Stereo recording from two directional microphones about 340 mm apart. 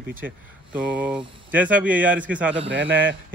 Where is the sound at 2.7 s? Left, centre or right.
Right.